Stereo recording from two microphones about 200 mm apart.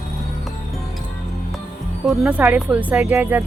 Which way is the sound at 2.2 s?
5° right (ahead or behind).